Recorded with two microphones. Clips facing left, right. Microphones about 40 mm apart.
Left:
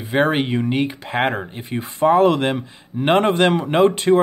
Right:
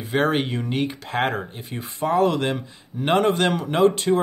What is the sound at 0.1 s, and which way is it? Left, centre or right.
Speech, centre.